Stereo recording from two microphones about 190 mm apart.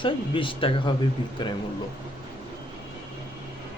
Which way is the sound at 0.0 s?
25° left (ahead or behind).